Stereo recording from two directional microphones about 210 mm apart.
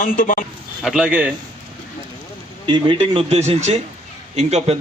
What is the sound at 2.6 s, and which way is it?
A man's voice, 25° right (ahead or behind).